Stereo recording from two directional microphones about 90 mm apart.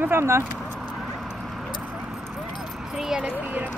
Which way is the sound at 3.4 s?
15° right (ahead or behind).